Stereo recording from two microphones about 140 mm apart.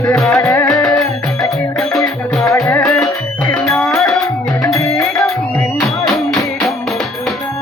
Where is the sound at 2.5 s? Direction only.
20° left (ahead or behind).